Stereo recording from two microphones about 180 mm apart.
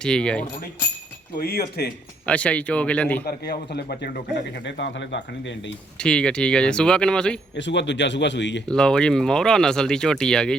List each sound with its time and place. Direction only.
0.0 s speech: 5° left (ahead or behind)
1.4 s a man's voice: 60° left (ahead or behind)
2.2 s speech: 5° left (ahead or behind)
3.2 s a man's voice: 60° left (ahead or behind)
4.6 s speech: 80° left
6.0 s speech: 5° left (ahead or behind)
7.5 s speech: 80° left
8.6 s speech: 5° left (ahead or behind)